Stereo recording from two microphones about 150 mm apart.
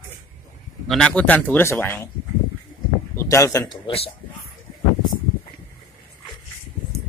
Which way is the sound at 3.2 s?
20° left (ahead or behind).